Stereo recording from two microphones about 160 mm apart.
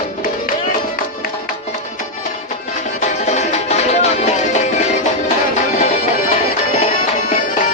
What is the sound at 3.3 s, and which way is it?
Music, 45° left (ahead or behind).